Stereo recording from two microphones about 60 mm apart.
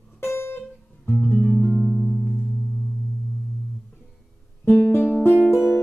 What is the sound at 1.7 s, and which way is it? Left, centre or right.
Music, centre.